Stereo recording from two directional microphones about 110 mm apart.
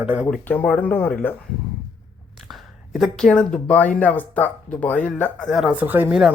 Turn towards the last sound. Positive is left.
turn(degrees=-5)  # may be behind; listen again after turning